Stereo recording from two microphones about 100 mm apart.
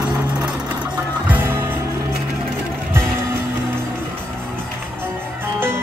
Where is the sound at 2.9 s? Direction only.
25° right (ahead or behind).